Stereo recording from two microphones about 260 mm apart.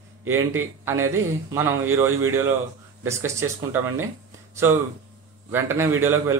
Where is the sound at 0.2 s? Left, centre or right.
Centre.